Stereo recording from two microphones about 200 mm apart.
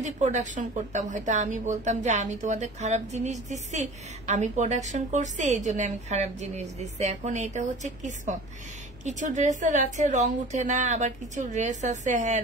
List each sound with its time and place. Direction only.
0.0 s a woman's voice: 35° right (ahead or behind)